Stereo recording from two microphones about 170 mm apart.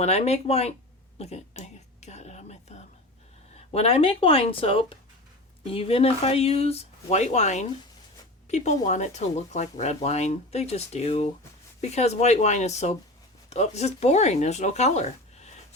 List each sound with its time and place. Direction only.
0.0 s speech: 40° left (ahead or behind)
1.2 s a sound: 40° left (ahead or behind)
3.7 s speech: 35° left (ahead or behind)